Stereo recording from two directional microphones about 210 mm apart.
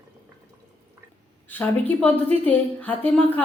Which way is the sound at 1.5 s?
10° left (ahead or behind).